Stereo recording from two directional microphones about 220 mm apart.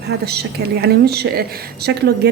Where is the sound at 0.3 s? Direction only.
45° right (ahead or behind).